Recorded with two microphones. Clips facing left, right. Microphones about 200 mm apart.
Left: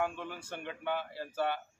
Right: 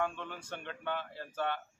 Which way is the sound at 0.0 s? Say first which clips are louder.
Left 1 dB; 10° left (ahead or behind).